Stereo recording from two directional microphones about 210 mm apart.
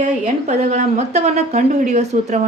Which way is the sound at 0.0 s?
35° right (ahead or behind).